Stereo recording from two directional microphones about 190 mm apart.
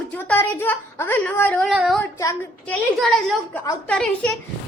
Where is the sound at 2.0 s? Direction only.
15° left (ahead or behind).